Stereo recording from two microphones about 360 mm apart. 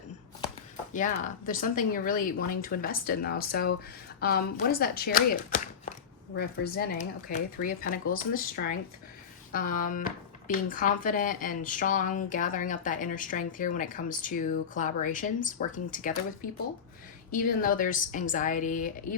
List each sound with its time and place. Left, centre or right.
0.9 s speech: left
17.3 s speech: left